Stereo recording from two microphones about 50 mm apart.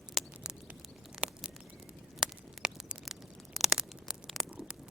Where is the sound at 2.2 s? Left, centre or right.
Centre.